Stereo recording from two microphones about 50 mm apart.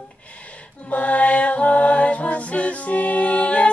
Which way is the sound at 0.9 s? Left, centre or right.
Left.